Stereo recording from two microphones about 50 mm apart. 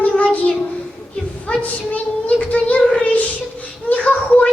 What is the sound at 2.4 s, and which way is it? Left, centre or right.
Child singing, left.